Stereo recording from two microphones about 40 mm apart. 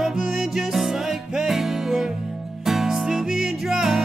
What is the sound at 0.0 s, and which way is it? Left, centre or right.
Music, centre.